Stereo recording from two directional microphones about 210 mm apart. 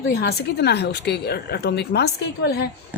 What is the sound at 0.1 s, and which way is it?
Speech, 50° left (ahead or behind).